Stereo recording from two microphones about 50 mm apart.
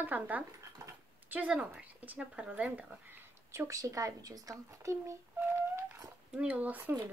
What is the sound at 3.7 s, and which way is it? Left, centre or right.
Speech, right.